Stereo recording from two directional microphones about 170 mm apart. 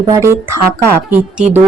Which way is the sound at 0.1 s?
15° right (ahead or behind).